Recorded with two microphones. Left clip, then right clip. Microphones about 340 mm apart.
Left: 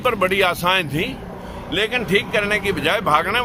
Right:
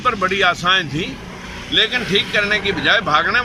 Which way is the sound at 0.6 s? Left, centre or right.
Left.